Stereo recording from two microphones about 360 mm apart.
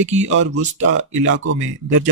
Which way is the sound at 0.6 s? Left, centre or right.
Right.